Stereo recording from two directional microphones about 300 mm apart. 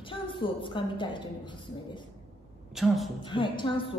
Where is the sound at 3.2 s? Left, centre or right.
Centre.